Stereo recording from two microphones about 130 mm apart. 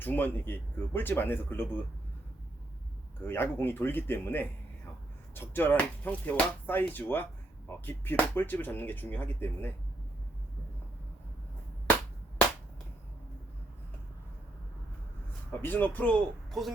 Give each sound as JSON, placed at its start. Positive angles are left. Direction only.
{"t": 0.0, "sound": "speech", "side_deg": 15}
{"t": 3.2, "sound": "speech", "side_deg": 15}
{"t": 15.6, "sound": "speech", "side_deg": 15}
{"t": 16.5, "sound": "speech", "side_deg": 0}